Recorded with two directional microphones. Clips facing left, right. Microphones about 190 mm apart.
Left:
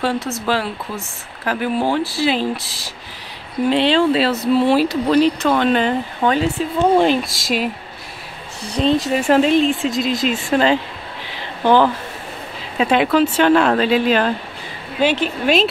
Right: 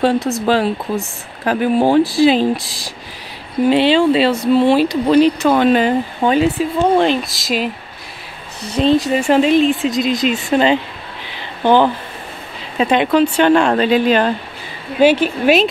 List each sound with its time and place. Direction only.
0.0 s speech: 15° right (ahead or behind)
3.7 s speech: centre (ahead or behind)
7.0 s speech: 10° left (ahead or behind)
8.7 s speech: centre (ahead or behind)
10.4 s speech: 20° right (ahead or behind)
12.7 s speech: 5° left (ahead or behind)
15.0 s speech: 10° right (ahead or behind)